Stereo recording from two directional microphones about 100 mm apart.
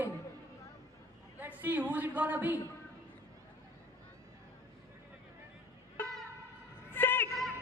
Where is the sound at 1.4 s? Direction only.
20° right (ahead or behind).